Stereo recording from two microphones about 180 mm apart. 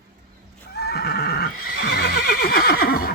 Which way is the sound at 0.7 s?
60° left (ahead or behind).